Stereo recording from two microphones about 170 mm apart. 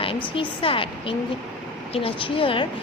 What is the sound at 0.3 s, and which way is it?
Speech, 30° left (ahead or behind).